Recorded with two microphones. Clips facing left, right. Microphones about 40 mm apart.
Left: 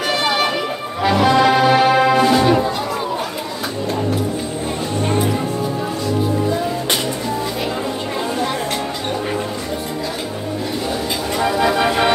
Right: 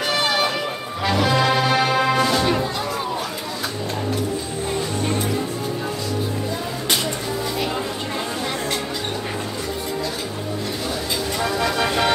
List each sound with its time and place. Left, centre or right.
0.1 s music: centre
11.3 s vehicle: centre